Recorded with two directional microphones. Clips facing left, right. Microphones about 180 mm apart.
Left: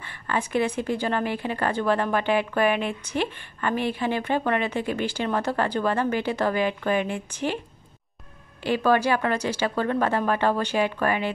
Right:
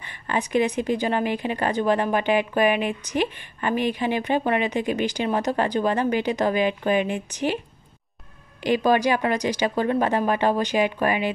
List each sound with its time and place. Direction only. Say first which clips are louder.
0.0 s a woman's voice: right 1 dB; 15° right (ahead or behind)
8.6 s a woman's voice: right 2 dB; 15° right (ahead or behind)